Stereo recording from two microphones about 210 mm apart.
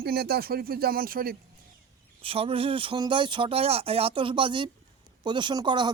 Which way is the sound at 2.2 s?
25° right (ahead or behind).